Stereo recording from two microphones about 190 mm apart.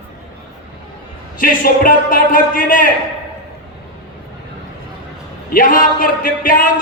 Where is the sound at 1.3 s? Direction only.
45° left (ahead or behind).